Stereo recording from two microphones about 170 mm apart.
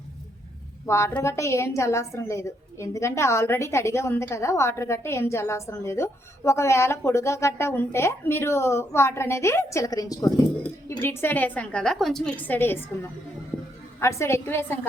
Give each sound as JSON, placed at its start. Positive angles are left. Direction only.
{"t": 0.9, "sound": "a woman's voice", "side_deg": 15}